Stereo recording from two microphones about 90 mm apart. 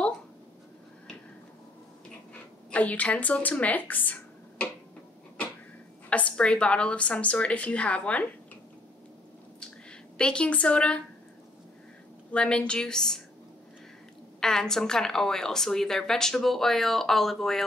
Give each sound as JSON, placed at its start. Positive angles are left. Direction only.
{"t": 2.7, "sound": "a woman's voice", "side_deg": 15}
{"t": 6.0, "sound": "a woman's voice", "side_deg": 15}
{"t": 9.6, "sound": "a sound", "side_deg": 10}
{"t": 12.3, "sound": "a woman's voice", "side_deg": 10}
{"t": 14.4, "sound": "a woman's voice", "side_deg": 5}